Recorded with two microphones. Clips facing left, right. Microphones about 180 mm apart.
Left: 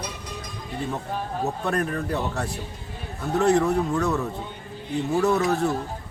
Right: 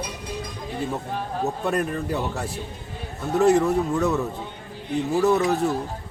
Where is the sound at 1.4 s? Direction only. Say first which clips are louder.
Right 1 dB; centre (ahead or behind).